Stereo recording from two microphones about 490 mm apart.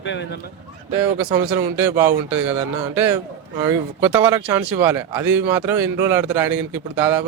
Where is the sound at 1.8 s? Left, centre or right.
Centre.